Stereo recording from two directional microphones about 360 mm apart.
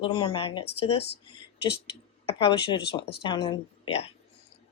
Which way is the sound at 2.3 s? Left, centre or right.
Centre.